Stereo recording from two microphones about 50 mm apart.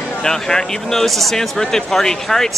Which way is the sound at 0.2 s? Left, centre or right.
Centre.